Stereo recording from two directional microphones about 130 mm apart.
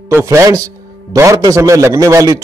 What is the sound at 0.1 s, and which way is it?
A man's voice, 20° right (ahead or behind).